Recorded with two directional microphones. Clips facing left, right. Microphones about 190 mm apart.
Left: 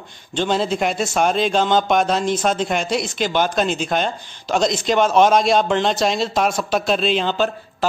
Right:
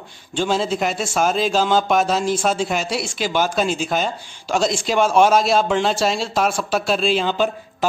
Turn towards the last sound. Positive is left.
turn(degrees=-10)  # may be behind; listen again after turning